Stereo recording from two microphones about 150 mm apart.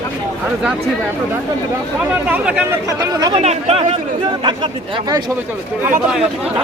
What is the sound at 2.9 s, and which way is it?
Speech, 25° right (ahead or behind).